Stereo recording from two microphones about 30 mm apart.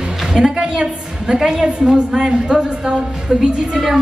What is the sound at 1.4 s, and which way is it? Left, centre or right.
A woman's voice, centre.